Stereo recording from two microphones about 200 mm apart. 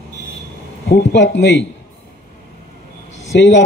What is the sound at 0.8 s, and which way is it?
Speech, 60° left (ahead or behind).